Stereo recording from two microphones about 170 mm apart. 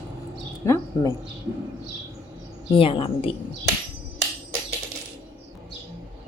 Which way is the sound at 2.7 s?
30° left (ahead or behind).